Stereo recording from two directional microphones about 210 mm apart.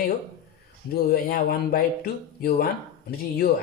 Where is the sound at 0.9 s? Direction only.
45° left (ahead or behind).